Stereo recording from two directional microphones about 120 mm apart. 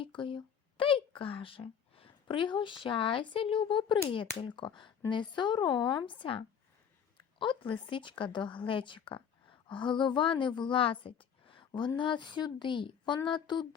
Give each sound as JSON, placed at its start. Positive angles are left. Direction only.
{"t": 0.0, "sound": "a woman's voice", "side_deg": 45}